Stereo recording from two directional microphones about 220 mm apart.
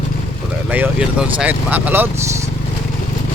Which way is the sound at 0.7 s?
5° right (ahead or behind).